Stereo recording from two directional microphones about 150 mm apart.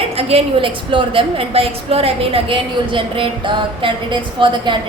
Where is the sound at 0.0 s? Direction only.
40° right (ahead or behind).